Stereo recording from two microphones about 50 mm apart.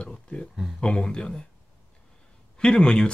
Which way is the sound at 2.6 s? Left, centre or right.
Centre.